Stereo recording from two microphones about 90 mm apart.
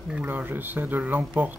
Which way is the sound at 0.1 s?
20° right (ahead or behind).